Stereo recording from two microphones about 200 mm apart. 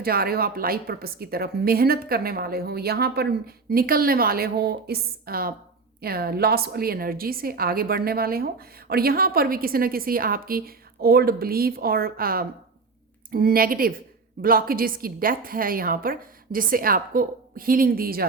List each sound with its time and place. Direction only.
0.0 s a woman's voice: 50° right (ahead or behind)